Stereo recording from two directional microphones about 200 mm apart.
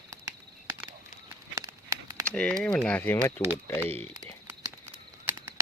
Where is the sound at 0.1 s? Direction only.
15° right (ahead or behind).